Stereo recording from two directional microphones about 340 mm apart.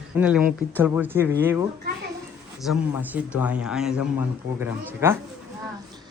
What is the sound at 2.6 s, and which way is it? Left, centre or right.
Speech, centre.